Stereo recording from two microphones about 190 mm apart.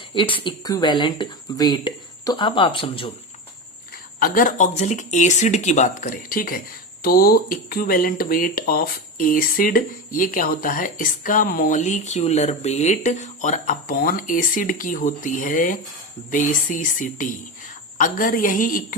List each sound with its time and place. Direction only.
0.1 s speech: 25° left (ahead or behind)
4.2 s speech: 45° left (ahead or behind)